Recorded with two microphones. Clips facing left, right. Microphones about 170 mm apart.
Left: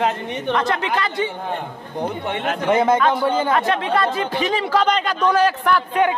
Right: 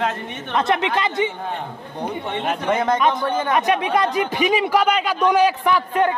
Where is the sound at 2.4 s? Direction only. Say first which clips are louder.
Left 3 dB; 5° left (ahead or behind).